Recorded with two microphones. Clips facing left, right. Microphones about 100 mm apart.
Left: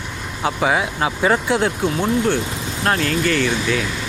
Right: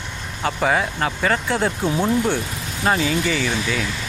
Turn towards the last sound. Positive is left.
turn(degrees=0)  # may be behind; listen again after turning